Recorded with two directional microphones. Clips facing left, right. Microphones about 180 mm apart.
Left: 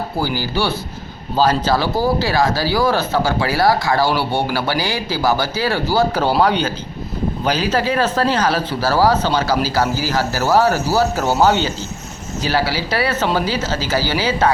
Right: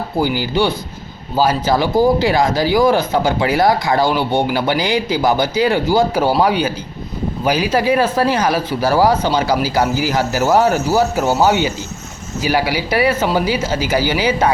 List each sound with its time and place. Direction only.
0.2 s speech: 20° right (ahead or behind)